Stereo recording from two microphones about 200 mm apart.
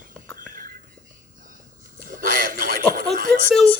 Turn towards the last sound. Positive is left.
turn(degrees=5)  # may be behind; listen again after turning